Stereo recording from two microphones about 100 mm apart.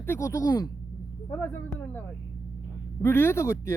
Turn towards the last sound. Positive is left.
turn(degrees=30)  # may be behind; listen again after turning